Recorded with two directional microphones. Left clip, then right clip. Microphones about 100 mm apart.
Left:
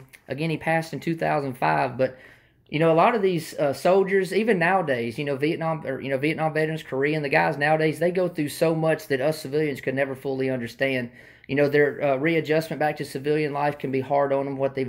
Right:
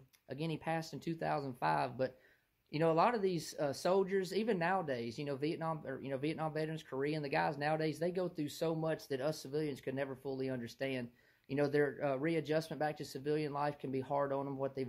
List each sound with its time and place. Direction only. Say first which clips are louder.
0.3 s speech: left 14 dB; 20° right (ahead or behind)
8.5 s speech: left 16 dB; 10° right (ahead or behind); by 14.9 s 30° right (ahead or behind)